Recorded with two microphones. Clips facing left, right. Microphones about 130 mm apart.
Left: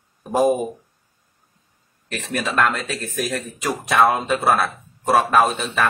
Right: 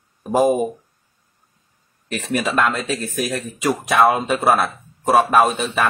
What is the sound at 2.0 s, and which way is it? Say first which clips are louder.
Speech: right 3 dB; 10° right (ahead or behind).